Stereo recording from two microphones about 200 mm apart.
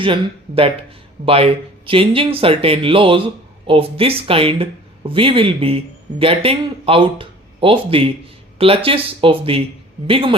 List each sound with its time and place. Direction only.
0.0 s speech: 25° right (ahead or behind)